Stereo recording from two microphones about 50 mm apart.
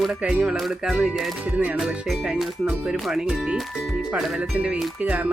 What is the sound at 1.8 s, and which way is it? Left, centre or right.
Music, centre.